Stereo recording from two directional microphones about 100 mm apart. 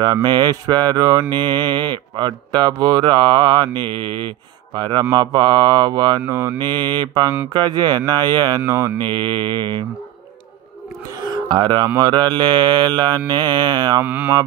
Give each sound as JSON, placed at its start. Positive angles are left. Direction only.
{"t": 0.0, "sound": "speech", "side_deg": -45}
{"t": 6.2, "sound": "mantra", "side_deg": -35}
{"t": 6.6, "sound": "speech", "side_deg": -50}
{"t": 8.6, "sound": "mantra", "side_deg": -30}
{"t": 8.9, "sound": "speech", "side_deg": -50}
{"t": 11.1, "sound": "speech", "side_deg": -40}
{"t": 14.0, "sound": "mantra", "side_deg": -15}